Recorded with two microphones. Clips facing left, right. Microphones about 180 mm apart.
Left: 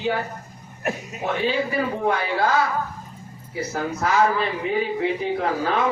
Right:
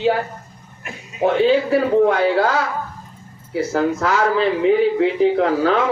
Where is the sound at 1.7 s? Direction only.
75° right (ahead or behind).